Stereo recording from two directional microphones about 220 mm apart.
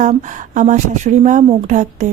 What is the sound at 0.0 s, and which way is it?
Speech, 35° right (ahead or behind).